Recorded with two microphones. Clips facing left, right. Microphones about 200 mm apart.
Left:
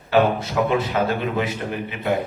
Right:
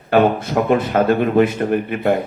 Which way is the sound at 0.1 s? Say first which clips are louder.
Right 4 dB; 55° right (ahead or behind).